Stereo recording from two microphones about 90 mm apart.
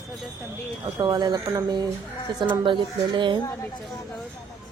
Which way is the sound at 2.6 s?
65° right (ahead or behind).